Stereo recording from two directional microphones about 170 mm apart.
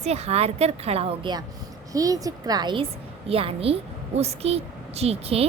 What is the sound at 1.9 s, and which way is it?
A woman's voice, 20° right (ahead or behind).